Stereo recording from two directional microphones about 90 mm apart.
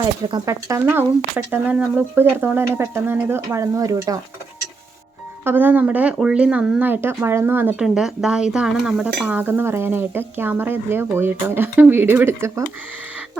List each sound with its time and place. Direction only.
0.4 s dishes: 30° right (ahead or behind)
5.5 s dishes: 20° right (ahead or behind)
6.1 s speech: 10° right (ahead or behind)
6.8 s dishes: 25° right (ahead or behind)
7.8 s speech: 5° right (ahead or behind)
8.7 s dishes: 5° right (ahead or behind); by 12.6 s 30° right (ahead or behind)